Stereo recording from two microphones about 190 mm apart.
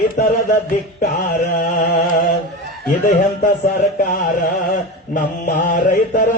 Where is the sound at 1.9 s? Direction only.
55° left (ahead or behind).